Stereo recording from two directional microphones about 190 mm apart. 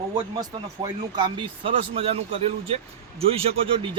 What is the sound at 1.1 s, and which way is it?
Speech, 25° right (ahead or behind).